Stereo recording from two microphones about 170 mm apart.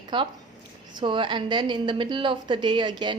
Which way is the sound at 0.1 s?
25° right (ahead or behind).